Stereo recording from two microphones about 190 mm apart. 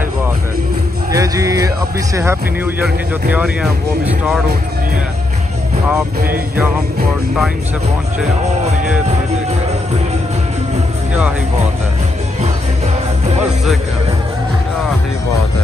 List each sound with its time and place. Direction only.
1.1 s music: 20° right (ahead or behind)
2.1 s speech: 10° right (ahead or behind)